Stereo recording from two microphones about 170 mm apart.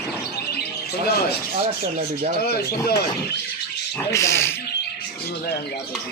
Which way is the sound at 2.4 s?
70° left (ahead or behind).